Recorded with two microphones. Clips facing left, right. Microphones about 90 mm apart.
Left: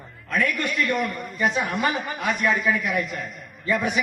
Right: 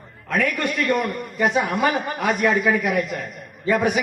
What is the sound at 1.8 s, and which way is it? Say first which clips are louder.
Speech: right 4 dB; 50° right (ahead or behind).